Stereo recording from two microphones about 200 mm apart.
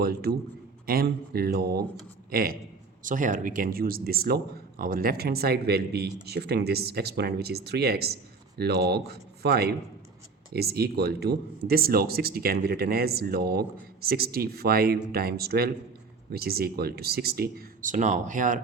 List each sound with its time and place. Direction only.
0.0 s speech: 50° right (ahead or behind)